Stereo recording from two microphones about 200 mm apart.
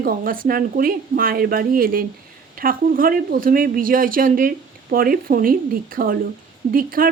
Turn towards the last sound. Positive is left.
turn(degrees=-45)  # may be behind; listen again after turning